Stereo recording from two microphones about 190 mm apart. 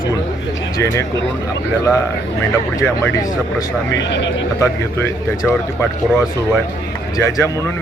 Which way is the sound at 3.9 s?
70° left (ahead or behind).